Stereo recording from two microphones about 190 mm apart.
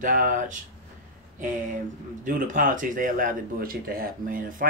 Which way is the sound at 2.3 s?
45° right (ahead or behind).